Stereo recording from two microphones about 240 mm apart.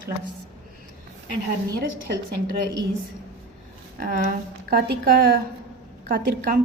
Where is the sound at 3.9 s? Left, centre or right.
Right.